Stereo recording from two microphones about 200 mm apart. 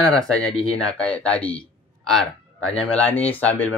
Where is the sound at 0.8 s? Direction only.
5° left (ahead or behind).